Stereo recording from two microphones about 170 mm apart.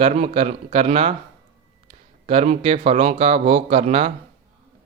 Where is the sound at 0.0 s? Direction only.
35° right (ahead or behind).